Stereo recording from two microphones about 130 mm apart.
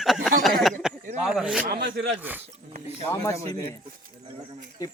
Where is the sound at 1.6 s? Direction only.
90° right.